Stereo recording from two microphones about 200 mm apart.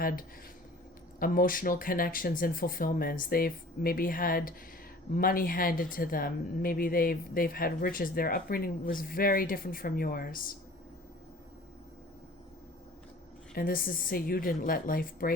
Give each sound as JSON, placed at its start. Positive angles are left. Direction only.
{"t": 0.0, "sound": "speech", "side_deg": 45}
{"t": 13.5, "sound": "speech", "side_deg": 45}